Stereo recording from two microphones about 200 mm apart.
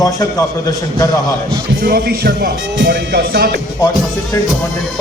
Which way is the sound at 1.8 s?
50° right (ahead or behind).